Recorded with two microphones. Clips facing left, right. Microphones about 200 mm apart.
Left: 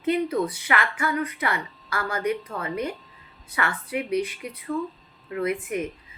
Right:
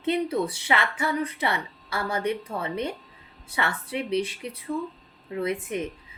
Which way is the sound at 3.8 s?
30° right (ahead or behind).